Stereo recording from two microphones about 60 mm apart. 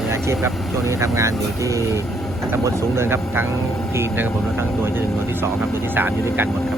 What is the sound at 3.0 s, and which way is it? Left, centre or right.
Speech, right.